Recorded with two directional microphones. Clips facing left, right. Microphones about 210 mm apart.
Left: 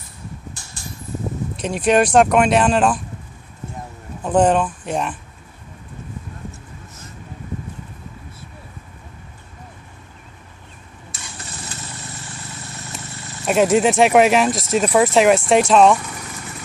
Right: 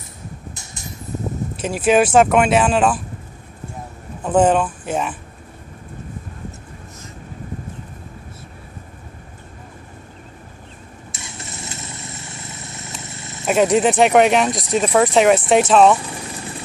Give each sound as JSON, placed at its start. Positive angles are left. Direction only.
{"t": 0.6, "sound": "a sound", "side_deg": -20}
{"t": 1.6, "sound": "speech", "side_deg": -5}
{"t": 4.2, "sound": "speech", "side_deg": 0}
{"t": 11.1, "sound": "vehicle", "side_deg": -25}
{"t": 13.5, "sound": "speech", "side_deg": 0}
{"t": 16.0, "sound": "vehicle", "side_deg": -30}